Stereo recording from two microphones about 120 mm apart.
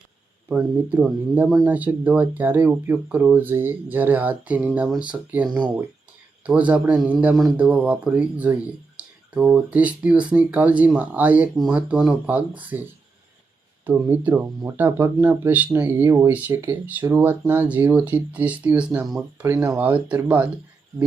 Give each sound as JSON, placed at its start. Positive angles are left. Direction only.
{"t": 0.4, "sound": "speech", "side_deg": -15}
{"t": 5.5, "sound": "speech", "side_deg": -40}
{"t": 6.4, "sound": "speech", "side_deg": -10}
{"t": 13.8, "sound": "speech", "side_deg": -15}